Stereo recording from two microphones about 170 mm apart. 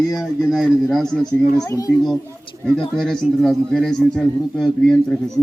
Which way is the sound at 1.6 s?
20° left (ahead or behind).